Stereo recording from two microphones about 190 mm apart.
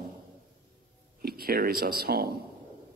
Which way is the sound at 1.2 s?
55° right (ahead or behind).